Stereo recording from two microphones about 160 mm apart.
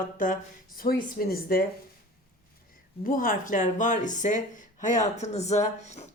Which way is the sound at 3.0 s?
60° left (ahead or behind).